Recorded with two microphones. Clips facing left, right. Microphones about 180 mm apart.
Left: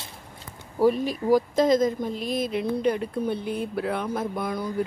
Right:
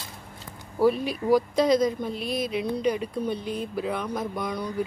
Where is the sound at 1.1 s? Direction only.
45° left (ahead or behind).